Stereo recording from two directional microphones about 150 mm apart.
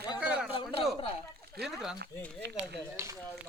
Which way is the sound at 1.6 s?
90° right.